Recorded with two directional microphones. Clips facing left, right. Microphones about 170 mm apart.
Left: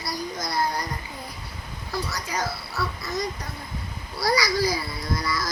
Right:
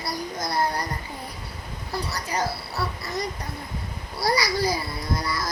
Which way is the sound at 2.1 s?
30° right (ahead or behind).